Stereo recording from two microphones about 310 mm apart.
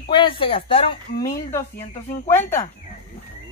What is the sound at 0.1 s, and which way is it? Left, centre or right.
Speech, centre.